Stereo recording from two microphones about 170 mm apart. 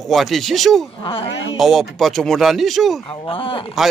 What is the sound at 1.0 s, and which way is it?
Speech, 30° left (ahead or behind).